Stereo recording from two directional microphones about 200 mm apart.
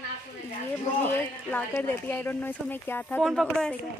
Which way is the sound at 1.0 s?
10° left (ahead or behind).